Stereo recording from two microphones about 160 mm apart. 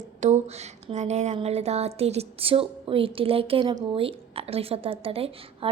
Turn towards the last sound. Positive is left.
turn(degrees=-35)  # may be behind; listen again after turning